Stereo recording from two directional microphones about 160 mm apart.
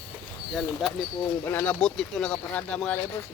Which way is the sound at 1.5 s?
10° left (ahead or behind).